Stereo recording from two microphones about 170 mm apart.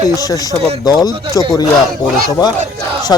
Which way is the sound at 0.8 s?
20° left (ahead or behind).